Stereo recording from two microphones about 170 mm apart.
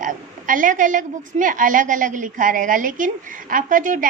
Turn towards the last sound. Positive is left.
turn(degrees=-50)  # may be behind; listen again after turning